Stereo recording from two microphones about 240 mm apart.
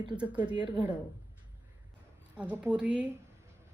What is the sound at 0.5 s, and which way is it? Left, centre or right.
Speech, centre.